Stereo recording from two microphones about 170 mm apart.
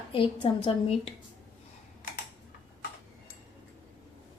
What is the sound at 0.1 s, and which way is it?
A woman's voice, 30° left (ahead or behind).